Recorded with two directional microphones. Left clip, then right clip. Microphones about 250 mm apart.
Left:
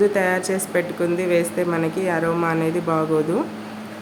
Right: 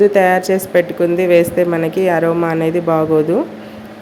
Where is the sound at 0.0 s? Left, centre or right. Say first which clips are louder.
Right 8 dB; centre.